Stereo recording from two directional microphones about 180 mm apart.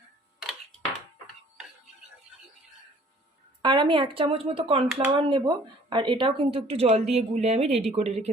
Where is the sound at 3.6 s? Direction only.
25° right (ahead or behind).